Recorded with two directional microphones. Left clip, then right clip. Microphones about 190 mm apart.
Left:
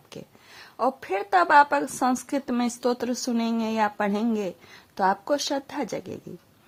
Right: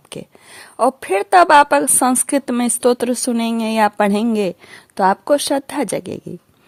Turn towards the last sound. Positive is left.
turn(degrees=-45)  # may be behind; listen again after turning